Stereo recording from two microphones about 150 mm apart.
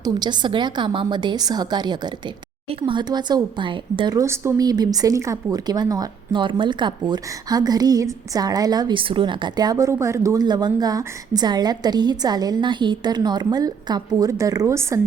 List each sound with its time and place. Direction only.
0.0 s speech: 30° right (ahead or behind)